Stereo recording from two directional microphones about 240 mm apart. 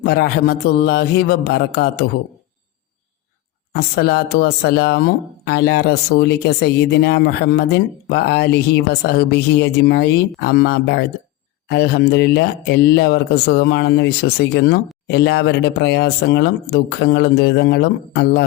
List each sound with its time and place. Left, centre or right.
0.0 s speech: left
3.7 s speech: left